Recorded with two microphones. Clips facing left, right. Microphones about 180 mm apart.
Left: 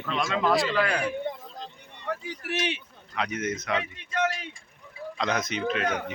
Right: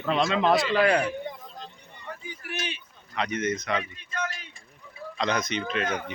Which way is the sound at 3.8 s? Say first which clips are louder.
Left 5 dB; 80° left.